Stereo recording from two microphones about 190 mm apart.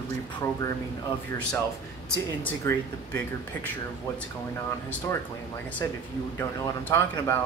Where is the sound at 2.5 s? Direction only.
10° left (ahead or behind).